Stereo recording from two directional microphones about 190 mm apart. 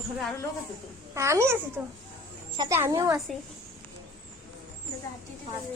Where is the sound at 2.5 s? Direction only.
15° right (ahead or behind).